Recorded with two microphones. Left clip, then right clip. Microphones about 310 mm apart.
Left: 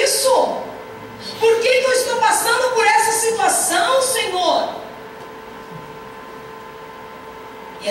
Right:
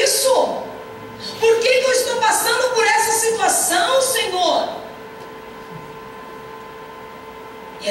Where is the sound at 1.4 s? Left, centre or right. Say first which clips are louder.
Even; centre.